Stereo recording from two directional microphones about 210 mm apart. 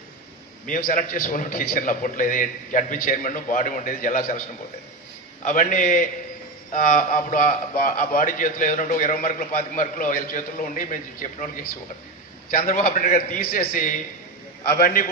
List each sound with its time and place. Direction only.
0.7 s a man's voice: 40° left (ahead or behind)
5.4 s a man's voice: 40° left (ahead or behind)